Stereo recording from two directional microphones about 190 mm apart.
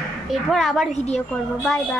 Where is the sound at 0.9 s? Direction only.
35° left (ahead or behind).